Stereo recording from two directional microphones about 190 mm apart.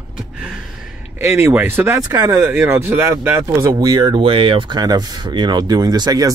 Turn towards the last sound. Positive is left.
turn(degrees=-20)  # may be behind; listen again after turning